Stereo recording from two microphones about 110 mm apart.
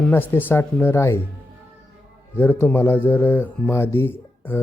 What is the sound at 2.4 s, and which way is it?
Speech, 20° left (ahead or behind).